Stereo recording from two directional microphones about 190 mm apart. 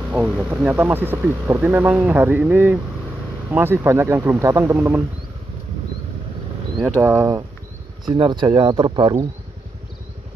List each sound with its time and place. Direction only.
0.1 s speech: 10° right (ahead or behind)
7.0 s speech: 15° right (ahead or behind)